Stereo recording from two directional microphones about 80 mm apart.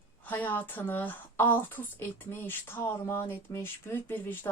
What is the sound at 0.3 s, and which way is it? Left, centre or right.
Speech, left.